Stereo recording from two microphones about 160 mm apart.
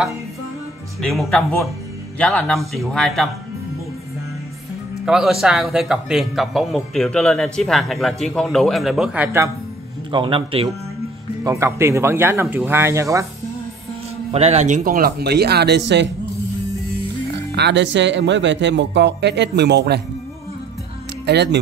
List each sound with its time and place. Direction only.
1.0 s speech: centre (ahead or behind)
5.0 s speech: 5° right (ahead or behind)
10.1 s a man's voice: 35° right (ahead or behind)
11.4 s speech: 20° right (ahead or behind)
14.3 s speech: 40° right (ahead or behind); by 16.1 s 90° right
17.5 s speech: 90° right
21.3 s speech: 90° right